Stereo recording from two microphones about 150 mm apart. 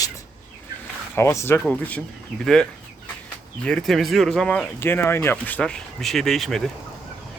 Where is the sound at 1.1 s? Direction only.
20° left (ahead or behind); by 6.7 s centre (ahead or behind).